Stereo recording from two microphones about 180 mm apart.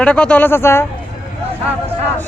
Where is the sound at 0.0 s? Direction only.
5° left (ahead or behind).